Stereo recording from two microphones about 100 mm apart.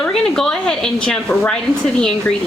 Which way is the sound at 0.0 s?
5° left (ahead or behind).